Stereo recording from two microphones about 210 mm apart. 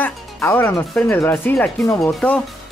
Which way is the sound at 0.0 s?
10° left (ahead or behind).